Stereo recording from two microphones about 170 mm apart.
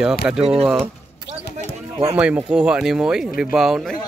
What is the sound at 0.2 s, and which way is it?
Speech, 10° right (ahead or behind).